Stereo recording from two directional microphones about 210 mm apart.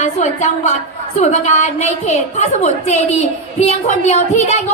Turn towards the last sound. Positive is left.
turn(degrees=30)  # may be behind; listen again after turning